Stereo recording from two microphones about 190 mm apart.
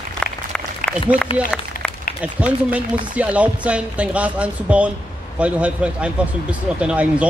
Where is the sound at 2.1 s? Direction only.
5° right (ahead or behind).